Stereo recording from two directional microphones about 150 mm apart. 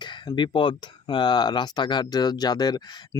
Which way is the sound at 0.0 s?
30° left (ahead or behind).